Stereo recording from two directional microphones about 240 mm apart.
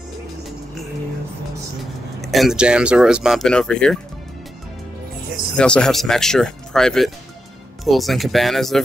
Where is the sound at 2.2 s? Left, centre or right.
Centre.